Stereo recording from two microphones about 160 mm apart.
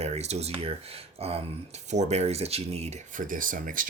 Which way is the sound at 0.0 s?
40° right (ahead or behind).